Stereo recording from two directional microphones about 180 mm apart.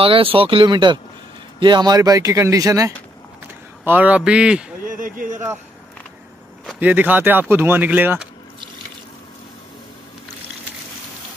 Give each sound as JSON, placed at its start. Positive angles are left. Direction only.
{"t": 0.0, "sound": "speech", "side_deg": -30}
{"t": 4.8, "sound": "a sound", "side_deg": -50}
{"t": 6.8, "sound": "speech", "side_deg": -10}